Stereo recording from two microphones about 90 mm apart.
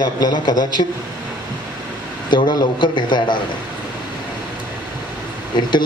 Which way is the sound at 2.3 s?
55° left (ahead or behind).